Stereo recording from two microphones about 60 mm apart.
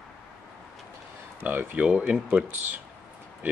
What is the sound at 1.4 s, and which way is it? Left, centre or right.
Speech, right.